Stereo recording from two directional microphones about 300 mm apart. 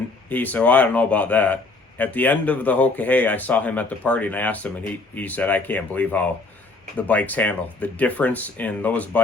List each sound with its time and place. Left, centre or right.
0.3 s speech: centre